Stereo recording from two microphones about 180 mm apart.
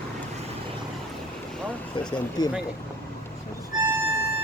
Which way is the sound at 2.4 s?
20° left (ahead or behind).